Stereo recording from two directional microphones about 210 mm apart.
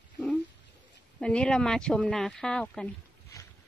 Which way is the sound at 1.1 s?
5° left (ahead or behind).